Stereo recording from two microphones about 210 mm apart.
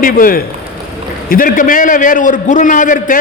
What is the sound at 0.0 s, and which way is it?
A man's voice, 40° left (ahead or behind).